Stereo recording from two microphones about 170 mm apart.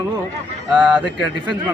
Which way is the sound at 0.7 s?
5° right (ahead or behind).